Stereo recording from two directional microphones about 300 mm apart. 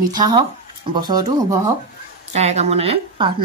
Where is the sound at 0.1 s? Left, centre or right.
Centre.